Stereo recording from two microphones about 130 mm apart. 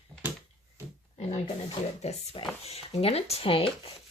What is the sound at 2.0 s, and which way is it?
Speech, 50° left (ahead or behind).